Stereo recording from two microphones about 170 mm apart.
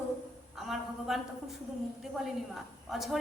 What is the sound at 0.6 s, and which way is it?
A woman's voice, centre (ahead or behind).